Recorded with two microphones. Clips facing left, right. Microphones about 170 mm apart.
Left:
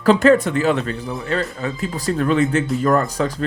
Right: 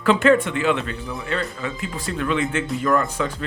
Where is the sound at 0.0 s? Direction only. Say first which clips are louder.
Left 3 dB; 40° left (ahead or behind).